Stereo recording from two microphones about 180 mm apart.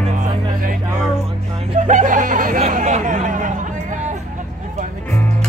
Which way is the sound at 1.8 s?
45° right (ahead or behind).